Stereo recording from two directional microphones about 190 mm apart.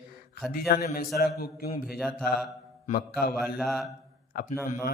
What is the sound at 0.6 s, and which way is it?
A man's voice, 50° left (ahead or behind).